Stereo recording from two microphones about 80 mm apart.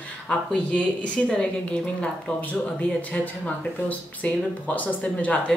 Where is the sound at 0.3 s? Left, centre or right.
Centre.